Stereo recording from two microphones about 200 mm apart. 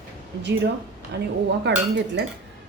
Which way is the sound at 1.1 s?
60° right (ahead or behind).